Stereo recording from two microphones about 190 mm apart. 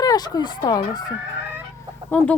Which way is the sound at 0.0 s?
20° left (ahead or behind).